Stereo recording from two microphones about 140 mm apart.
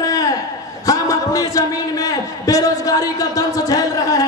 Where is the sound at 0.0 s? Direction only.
25° left (ahead or behind).